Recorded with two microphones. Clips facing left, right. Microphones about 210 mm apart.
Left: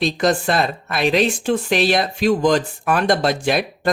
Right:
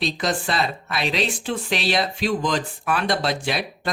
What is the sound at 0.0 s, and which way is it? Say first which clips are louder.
Speech: left 6 dB; 50° left (ahead or behind).